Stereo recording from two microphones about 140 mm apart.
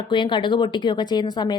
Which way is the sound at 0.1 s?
35° left (ahead or behind).